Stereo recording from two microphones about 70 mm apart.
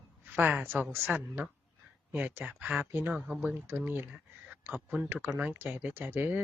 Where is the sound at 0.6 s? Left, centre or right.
Right.